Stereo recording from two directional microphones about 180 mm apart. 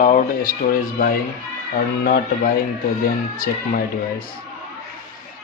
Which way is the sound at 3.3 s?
50° left (ahead or behind).